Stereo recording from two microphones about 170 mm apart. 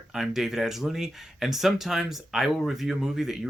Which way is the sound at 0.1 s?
Centre (ahead or behind).